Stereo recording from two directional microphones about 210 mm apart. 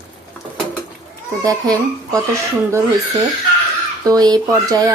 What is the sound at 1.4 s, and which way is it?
Speech, 15° right (ahead or behind).